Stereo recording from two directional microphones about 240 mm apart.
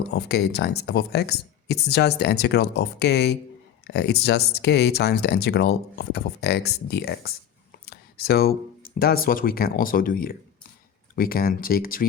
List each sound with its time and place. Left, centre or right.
0.1 s speech: left